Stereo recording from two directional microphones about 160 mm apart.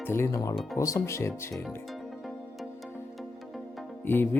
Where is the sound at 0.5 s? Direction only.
Centre (ahead or behind).